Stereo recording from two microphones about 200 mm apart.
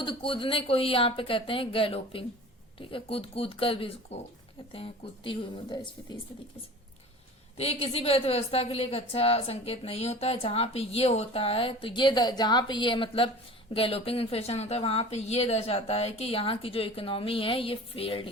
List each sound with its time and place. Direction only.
0.0 s a woman's voice: 25° left (ahead or behind)
7.5 s a woman's voice: 30° left (ahead or behind)